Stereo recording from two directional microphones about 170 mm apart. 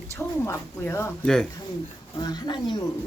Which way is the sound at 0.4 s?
15° left (ahead or behind).